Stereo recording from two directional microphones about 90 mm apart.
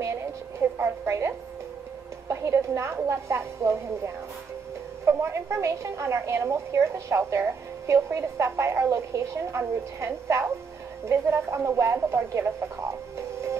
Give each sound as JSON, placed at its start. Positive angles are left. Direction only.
{"t": 0.7, "sound": "music", "side_deg": -30}
{"t": 2.2, "sound": "a woman's voice", "side_deg": -35}